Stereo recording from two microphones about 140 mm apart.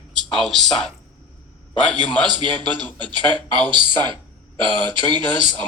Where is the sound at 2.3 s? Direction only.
35° right (ahead or behind).